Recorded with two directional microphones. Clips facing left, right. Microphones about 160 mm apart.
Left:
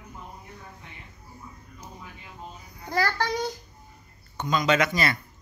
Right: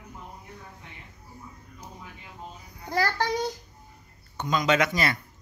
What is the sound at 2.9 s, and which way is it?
Child singing, 25° right (ahead or behind).